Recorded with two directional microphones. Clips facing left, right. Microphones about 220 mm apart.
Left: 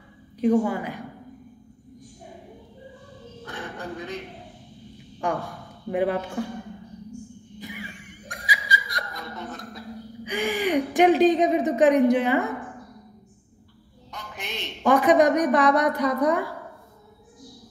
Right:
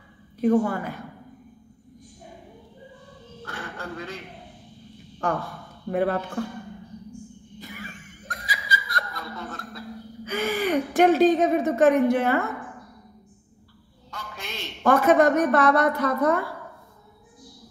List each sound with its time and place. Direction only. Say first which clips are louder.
0.4 s a woman's voice: even; 15° left (ahead or behind)
3.4 s quack: left 1 dB; 15° left (ahead or behind)
5.2 s speech: even; 15° left (ahead or behind)
7.6 s laughter: left 2 dB; 15° left (ahead or behind)
14.1 s a sound: left 1 dB; 15° left (ahead or behind)
14.8 s a woman's voice: even; 15° left (ahead or behind)